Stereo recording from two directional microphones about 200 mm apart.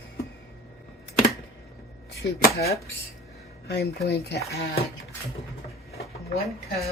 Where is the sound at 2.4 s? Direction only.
50° left (ahead or behind).